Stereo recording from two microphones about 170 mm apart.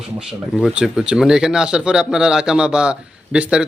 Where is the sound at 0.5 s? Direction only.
5° right (ahead or behind).